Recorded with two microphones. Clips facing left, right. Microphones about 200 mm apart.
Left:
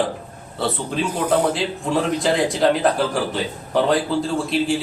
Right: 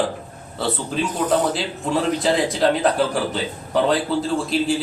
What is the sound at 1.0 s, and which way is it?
Speech, 10° left (ahead or behind).